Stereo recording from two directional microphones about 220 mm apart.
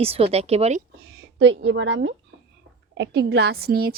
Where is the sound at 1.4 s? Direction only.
55° right (ahead or behind).